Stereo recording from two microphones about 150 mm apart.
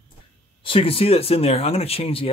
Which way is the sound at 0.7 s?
40° left (ahead or behind).